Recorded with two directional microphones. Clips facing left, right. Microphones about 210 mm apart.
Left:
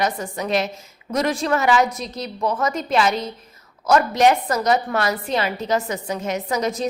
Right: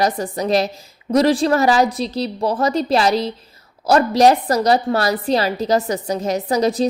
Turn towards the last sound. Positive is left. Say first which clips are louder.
# right 5 dB
turn(degrees=-35)  # may be behind; listen again after turning